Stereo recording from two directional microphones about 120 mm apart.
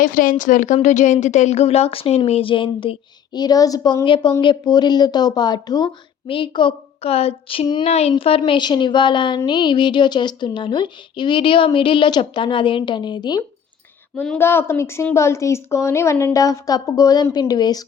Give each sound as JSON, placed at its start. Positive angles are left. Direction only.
{"t": 0.0, "sound": "speech", "side_deg": 90}
{"t": 4.0, "sound": "a woman's voice", "side_deg": 45}
{"t": 6.2, "sound": "speech", "side_deg": 45}
{"t": 7.9, "sound": "a woman's voice", "side_deg": 60}
{"t": 14.2, "sound": "a woman's voice", "side_deg": 15}